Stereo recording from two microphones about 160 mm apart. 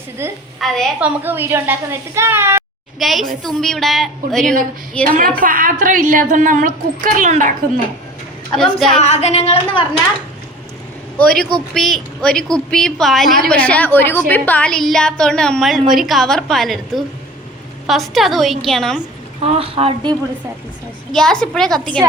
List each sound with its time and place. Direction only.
0.2 s a woman's voice: 15° right (ahead or behind)
0.6 s a woman's voice: centre (ahead or behind)
1.2 s a woman's voice: 15° right (ahead or behind)
3.0 s a woman's voice: centre (ahead or behind)
5.4 s a woman's voice: 60° right (ahead or behind)
8.5 s a woman's voice: 5° left (ahead or behind)
9.0 s a woman's voice: 45° left (ahead or behind)
11.2 s a woman's voice: 5° left (ahead or behind)
19.4 s speech: 35° right (ahead or behind)
21.1 s a woman's voice: 5° left (ahead or behind)